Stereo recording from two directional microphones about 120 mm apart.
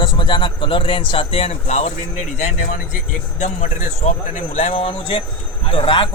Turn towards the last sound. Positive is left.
turn(degrees=45)  # may be behind; listen again after turning